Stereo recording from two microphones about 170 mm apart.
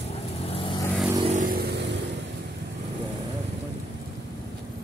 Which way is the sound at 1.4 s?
60° right (ahead or behind).